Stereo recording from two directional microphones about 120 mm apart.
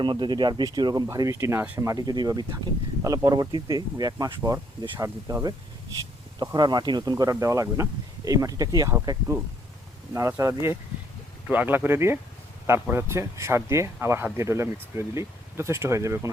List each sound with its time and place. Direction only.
0.0 s speech: 40° right (ahead or behind)
11.4 s speech: 15° right (ahead or behind)